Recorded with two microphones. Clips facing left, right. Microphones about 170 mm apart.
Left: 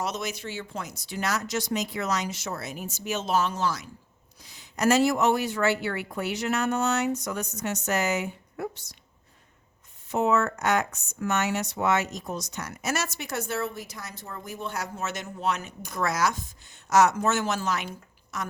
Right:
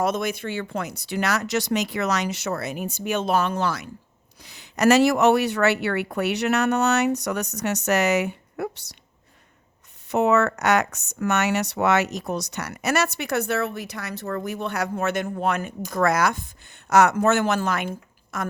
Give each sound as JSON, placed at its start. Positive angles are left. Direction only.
{"t": 0.0, "sound": "speech", "side_deg": -55}
{"t": 10.1, "sound": "speech", "side_deg": -70}